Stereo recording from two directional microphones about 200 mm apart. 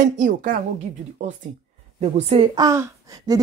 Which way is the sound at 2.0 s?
30° right (ahead or behind).